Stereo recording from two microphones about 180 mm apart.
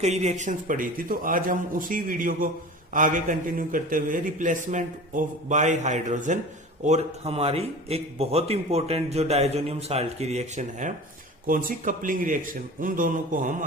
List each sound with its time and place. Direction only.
0.0 s a man's voice: 40° right (ahead or behind)